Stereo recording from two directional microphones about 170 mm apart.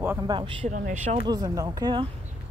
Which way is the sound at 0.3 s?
30° right (ahead or behind).